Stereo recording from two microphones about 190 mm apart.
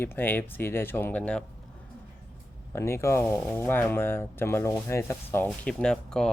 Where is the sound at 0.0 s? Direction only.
10° left (ahead or behind).